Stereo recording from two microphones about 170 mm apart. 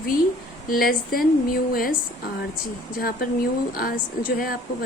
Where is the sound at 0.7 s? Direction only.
55° left (ahead or behind).